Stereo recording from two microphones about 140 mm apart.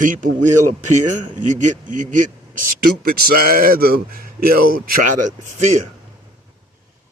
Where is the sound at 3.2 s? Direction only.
90° right.